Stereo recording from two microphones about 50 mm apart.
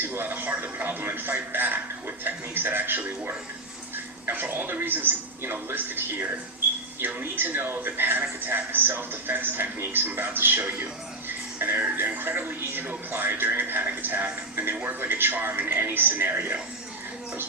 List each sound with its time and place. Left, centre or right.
0.0 s a man's voice: right